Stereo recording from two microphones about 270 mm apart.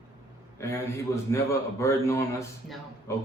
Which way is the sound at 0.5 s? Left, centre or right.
Centre.